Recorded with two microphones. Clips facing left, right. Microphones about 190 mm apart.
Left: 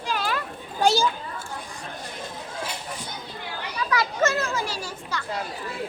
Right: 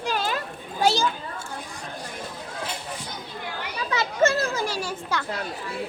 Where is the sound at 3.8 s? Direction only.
30° right (ahead or behind).